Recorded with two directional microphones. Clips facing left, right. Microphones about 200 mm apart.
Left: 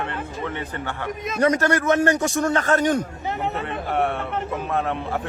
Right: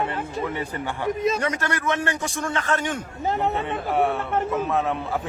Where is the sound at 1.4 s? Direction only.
40° left (ahead or behind).